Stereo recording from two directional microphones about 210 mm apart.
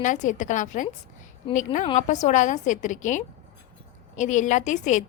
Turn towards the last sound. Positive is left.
turn(degrees=35)  # may be behind; listen again after turning